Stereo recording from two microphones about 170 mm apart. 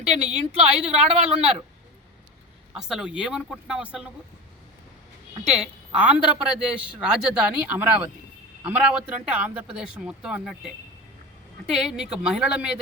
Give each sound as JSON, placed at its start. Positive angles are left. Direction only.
{"t": 0.1, "sound": "a woman's voice", "side_deg": -35}
{"t": 2.7, "sound": "speech", "side_deg": -5}
{"t": 5.5, "sound": "a man's voice", "side_deg": -5}
{"t": 11.7, "sound": "speech", "side_deg": 0}